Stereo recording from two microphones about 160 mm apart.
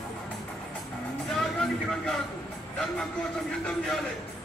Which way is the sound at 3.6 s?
5° left (ahead or behind).